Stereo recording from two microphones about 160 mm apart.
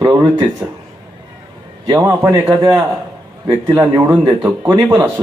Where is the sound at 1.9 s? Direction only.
20° right (ahead or behind).